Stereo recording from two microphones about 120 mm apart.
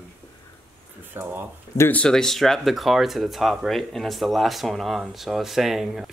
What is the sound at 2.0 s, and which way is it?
Speech, 5° left (ahead or behind).